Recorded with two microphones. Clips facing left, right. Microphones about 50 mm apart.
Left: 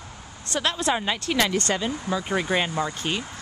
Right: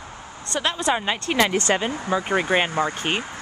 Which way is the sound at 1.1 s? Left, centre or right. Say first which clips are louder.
Right 3 dB; right.